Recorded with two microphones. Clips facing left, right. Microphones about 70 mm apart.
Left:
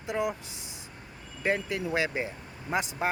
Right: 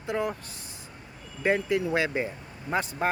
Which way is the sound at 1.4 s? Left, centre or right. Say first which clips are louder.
Right 4 dB; centre.